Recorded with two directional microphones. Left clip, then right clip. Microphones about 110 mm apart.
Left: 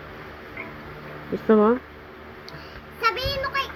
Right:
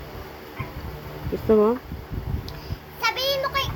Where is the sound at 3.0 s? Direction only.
25° right (ahead or behind).